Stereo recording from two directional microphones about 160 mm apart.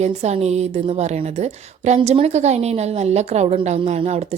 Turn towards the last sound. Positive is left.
turn(degrees=-40)  # may be behind; listen again after turning